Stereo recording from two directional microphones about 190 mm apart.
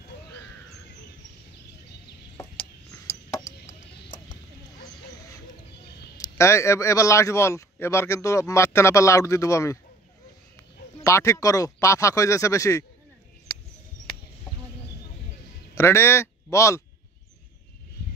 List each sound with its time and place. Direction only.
6.1 s a man's voice: 15° left (ahead or behind)
11.0 s a man's voice: 15° left (ahead or behind)
15.7 s speech: 15° left (ahead or behind)